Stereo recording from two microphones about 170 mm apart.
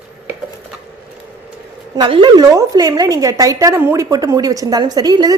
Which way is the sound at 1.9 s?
30° right (ahead or behind).